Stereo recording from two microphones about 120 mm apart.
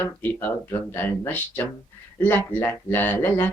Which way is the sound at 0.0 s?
15° left (ahead or behind).